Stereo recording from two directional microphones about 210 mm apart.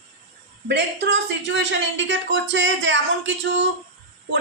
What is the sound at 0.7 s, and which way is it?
A woman's voice, 55° right (ahead or behind).